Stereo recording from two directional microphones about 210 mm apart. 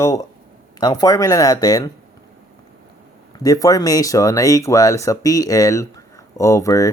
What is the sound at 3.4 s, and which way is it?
Speech, 15° left (ahead or behind).